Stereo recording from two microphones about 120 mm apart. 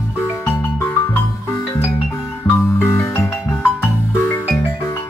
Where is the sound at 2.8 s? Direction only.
20° left (ahead or behind).